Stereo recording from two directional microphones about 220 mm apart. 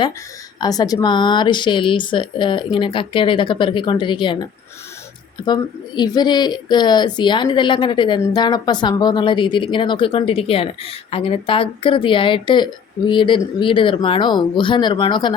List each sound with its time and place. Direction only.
0.6 s a woman's voice: 15° left (ahead or behind)
5.5 s a woman's voice: 20° left (ahead or behind)